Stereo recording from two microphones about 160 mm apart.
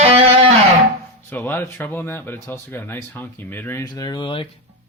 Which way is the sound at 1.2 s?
10° left (ahead or behind).